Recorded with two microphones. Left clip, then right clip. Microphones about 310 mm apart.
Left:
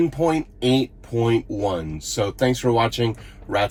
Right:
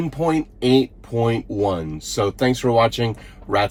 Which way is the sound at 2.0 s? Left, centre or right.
Centre.